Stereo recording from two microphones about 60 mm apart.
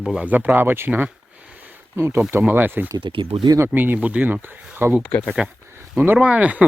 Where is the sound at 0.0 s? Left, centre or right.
Centre.